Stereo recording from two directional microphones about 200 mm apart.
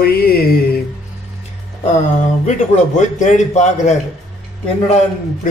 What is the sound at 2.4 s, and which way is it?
A man's voice, 35° left (ahead or behind).